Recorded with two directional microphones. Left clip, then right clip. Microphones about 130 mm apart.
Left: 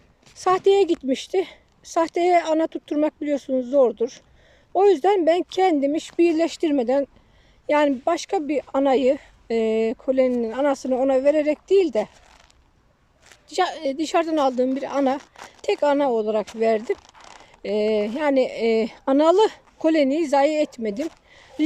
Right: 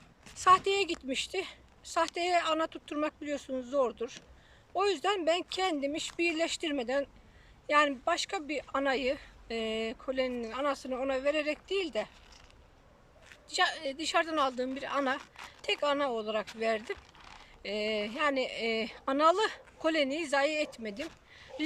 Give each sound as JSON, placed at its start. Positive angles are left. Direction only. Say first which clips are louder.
{"t": 0.3, "sound": "a woman's voice", "louder": "left 7 dB", "side_deg": 45}
{"t": 13.2, "sound": "a woman's voice", "louder": "left 7 dB", "side_deg": 50}